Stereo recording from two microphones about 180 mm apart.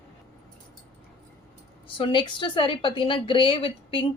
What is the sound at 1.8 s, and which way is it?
A woman's voice, 25° left (ahead or behind).